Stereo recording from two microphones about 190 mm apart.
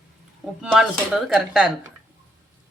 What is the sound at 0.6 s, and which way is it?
Speech, centre (ahead or behind).